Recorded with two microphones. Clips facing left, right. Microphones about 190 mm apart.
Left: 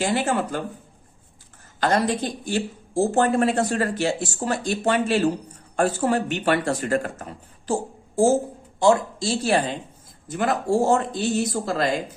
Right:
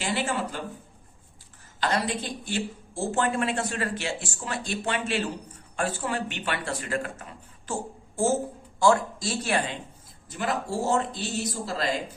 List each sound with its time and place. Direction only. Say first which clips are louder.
0.0 s speech: left 6 dB; 50° left (ahead or behind)
1.8 s speech: left 6 dB; 45° left (ahead or behind)
7.7 s speech: left 7 dB; 30° left (ahead or behind)
10.2 s speech: left 7 dB; 50° left (ahead or behind)